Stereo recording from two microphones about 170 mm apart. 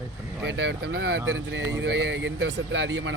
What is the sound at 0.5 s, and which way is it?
A man's voice, 85° right.